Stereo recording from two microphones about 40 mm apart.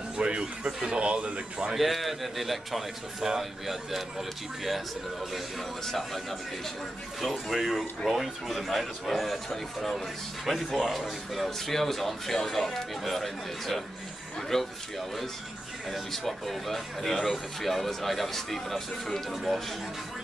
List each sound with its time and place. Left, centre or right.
0.2 s speech: right
1.8 s speech: centre
5.9 s speech: centre
16.1 s speech: centre